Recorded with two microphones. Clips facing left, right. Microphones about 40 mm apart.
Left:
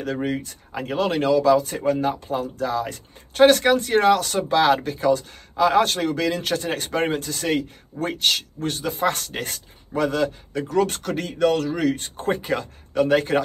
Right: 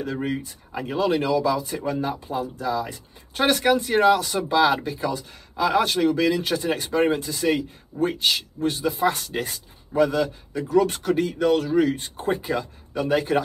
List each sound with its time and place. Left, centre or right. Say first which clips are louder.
0.0 s speech: left 2 dB; left
8.6 s speech: right 1 dB; left